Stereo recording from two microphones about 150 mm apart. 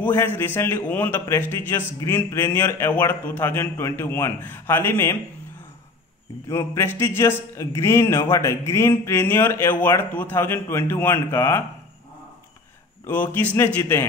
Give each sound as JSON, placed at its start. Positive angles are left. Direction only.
{"t": 0.0, "sound": "speech", "side_deg": 15}
{"t": 6.5, "sound": "speech", "side_deg": 20}
{"t": 13.0, "sound": "speech", "side_deg": 15}